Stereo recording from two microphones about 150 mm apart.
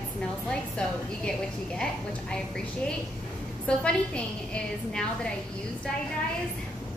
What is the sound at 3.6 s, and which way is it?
Speech, 5° left (ahead or behind).